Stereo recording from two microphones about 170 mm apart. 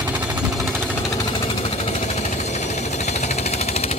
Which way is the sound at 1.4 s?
40° left (ahead or behind).